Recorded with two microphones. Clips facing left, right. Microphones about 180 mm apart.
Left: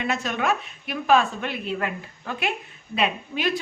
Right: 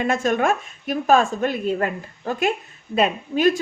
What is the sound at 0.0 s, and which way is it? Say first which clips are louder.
A woman's voice: right 6 dB; 50° right (ahead or behind).